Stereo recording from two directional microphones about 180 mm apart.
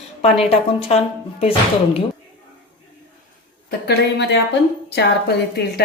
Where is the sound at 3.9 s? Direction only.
75° left (ahead or behind).